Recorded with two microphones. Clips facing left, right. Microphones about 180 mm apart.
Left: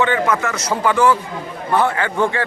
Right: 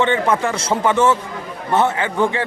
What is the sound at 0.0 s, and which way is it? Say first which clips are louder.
A man's voice: right 1 dB; 25° right (ahead or behind).